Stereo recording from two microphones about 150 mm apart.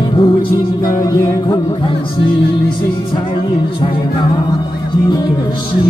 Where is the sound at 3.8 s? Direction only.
30° left (ahead or behind).